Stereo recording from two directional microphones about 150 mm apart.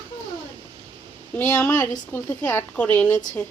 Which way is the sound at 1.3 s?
15° left (ahead or behind).